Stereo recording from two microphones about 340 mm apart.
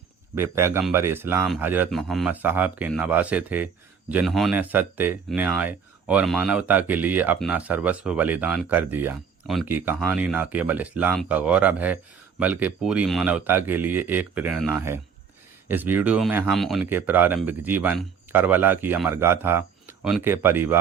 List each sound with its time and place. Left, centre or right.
0.3 s speech: centre